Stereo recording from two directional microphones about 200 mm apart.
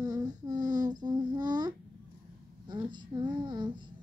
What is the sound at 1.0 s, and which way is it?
Child singing, 20° right (ahead or behind).